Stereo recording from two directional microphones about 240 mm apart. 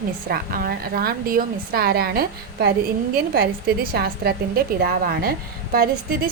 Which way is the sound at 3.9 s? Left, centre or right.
Right.